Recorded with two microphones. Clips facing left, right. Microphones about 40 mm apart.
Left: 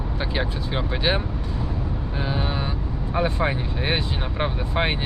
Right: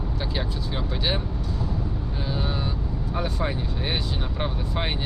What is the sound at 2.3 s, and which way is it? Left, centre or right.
Speech, left.